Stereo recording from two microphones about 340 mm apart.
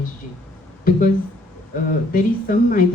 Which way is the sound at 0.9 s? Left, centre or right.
Left.